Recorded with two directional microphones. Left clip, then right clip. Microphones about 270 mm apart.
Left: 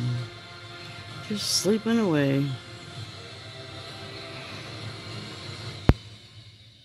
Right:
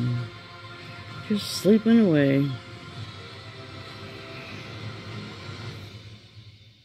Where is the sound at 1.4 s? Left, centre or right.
Centre.